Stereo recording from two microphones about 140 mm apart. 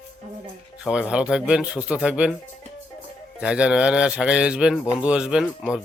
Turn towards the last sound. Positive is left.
turn(degrees=-5)  # may be behind; listen again after turning